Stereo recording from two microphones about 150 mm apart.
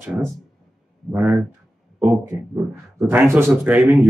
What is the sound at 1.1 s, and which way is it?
Speech, 5° right (ahead or behind).